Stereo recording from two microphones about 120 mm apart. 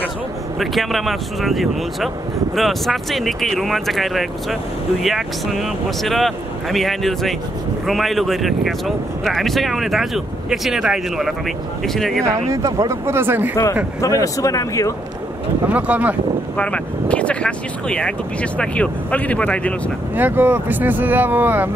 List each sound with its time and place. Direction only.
0.6 s speech: centre (ahead or behind)
12.6 s speech: 25° right (ahead or behind)
14.0 s speech: 30° left (ahead or behind)
15.7 s speech: 10° right (ahead or behind)
16.5 s speech: 10° left (ahead or behind)
20.2 s speech: 15° right (ahead or behind)